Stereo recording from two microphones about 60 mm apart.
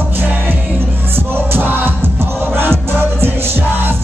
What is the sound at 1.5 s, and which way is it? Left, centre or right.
Music, right.